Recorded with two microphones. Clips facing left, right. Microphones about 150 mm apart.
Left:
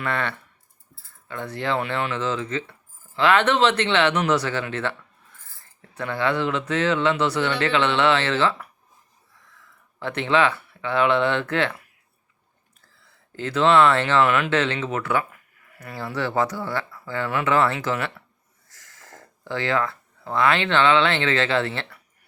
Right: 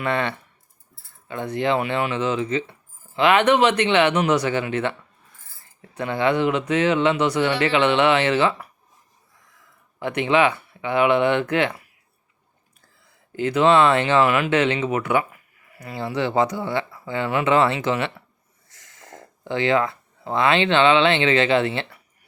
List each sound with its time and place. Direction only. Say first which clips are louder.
0.0 s speech: right 3 dB; 20° right (ahead or behind)
10.0 s speech: right 2 dB; 15° right (ahead or behind)
13.1 s speech: right 6 dB; 15° right (ahead or behind)